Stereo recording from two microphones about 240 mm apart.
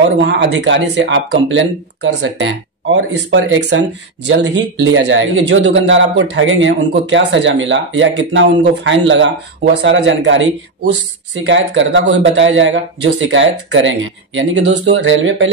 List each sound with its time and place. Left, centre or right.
0.2 s speech: right